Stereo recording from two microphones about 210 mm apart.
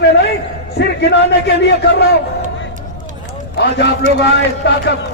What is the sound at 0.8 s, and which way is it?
A man's voice, 55° left (ahead or behind).